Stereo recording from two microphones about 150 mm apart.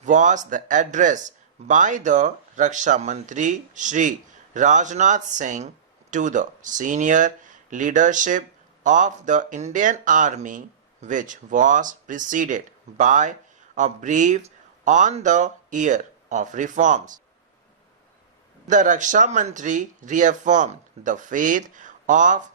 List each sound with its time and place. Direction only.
0.0 s speech: 55° right (ahead or behind)
18.7 s speech: 60° right (ahead or behind)